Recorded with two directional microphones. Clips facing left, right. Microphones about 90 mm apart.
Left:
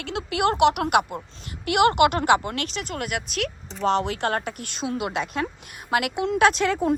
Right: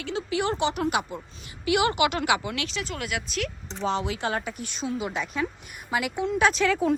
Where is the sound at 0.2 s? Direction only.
70° left (ahead or behind).